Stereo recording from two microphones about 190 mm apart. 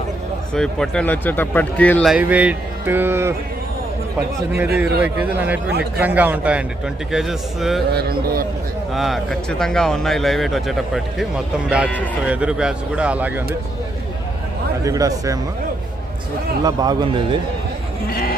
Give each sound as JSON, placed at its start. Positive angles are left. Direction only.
{"t": 0.5, "sound": "speech", "side_deg": 5}
{"t": 2.1, "sound": "a man's voice", "side_deg": -5}
{"t": 4.5, "sound": "a man's voice", "side_deg": -10}
{"t": 7.9, "sound": "a man's voice", "side_deg": -50}
{"t": 8.9, "sound": "a man's voice", "side_deg": 0}
{"t": 14.8, "sound": "a man's voice", "side_deg": -15}
{"t": 16.6, "sound": "a man's voice", "side_deg": -20}
{"t": 18.1, "sound": "speech", "side_deg": 50}